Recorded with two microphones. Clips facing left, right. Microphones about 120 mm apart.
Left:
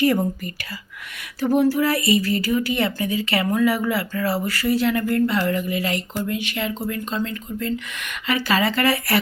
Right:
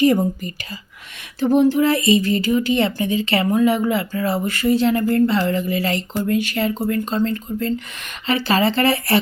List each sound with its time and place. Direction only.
0.0 s speech: 20° right (ahead or behind)
6.2 s speech: 45° right (ahead or behind); by 9.1 s 25° right (ahead or behind)